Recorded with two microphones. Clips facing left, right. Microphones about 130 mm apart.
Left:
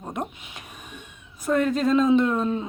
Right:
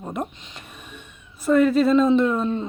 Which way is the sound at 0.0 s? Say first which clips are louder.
Right 2 dB; centre (ahead or behind).